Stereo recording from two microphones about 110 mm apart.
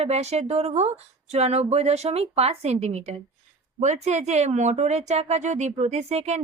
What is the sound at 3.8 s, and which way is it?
Speech, 90° right.